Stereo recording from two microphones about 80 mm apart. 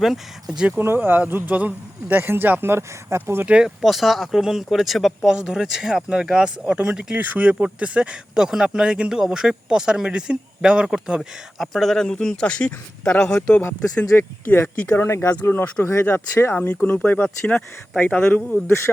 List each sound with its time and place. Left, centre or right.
0.0 s speech: centre
0.8 s speech: right
3.8 s speech: centre
14.2 s speech: left